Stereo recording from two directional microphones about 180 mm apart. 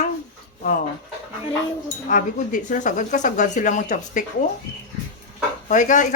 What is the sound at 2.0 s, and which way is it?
Speech, 45° left (ahead or behind).